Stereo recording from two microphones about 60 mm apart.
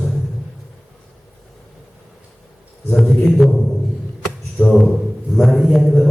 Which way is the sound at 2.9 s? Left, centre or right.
Centre.